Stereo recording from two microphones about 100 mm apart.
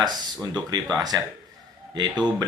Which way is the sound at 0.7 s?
40° right (ahead or behind).